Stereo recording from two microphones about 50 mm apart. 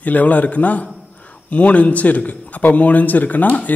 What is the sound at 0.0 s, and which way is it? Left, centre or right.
A man's voice, left.